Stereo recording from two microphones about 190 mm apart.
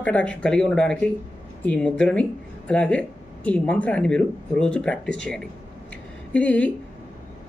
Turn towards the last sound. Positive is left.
turn(degrees=5)  # may be behind; listen again after turning